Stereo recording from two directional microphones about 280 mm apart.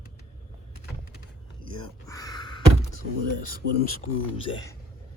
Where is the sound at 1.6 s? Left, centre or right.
Centre.